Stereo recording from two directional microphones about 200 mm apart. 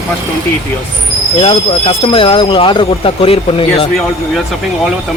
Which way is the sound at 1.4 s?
30° left (ahead or behind).